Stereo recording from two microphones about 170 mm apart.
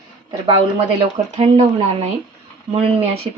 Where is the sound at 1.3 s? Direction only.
40° right (ahead or behind).